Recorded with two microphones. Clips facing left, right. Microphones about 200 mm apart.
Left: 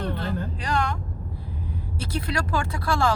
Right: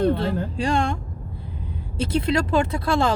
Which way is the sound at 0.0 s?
30° right (ahead or behind).